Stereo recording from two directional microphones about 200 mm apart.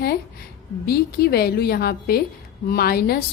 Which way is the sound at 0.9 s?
50° left (ahead or behind).